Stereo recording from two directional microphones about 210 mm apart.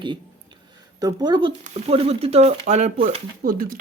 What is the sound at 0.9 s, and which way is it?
Speech, 20° right (ahead or behind).